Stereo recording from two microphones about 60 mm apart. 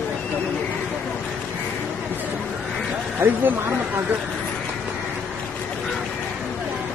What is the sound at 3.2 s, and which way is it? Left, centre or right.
Speech, right.